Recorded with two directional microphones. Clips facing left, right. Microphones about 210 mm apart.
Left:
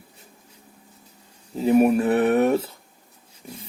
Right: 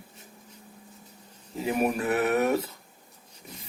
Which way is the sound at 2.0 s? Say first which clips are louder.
Left 6 dB; 30° left (ahead or behind).